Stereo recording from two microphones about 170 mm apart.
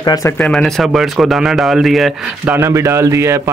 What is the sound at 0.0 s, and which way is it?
Speech, 20° left (ahead or behind).